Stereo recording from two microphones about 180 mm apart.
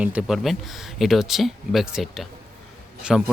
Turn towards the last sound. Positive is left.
turn(degrees=-5)  # may be behind; listen again after turning